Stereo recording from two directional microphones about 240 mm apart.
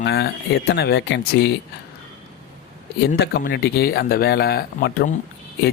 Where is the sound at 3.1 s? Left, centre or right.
Left.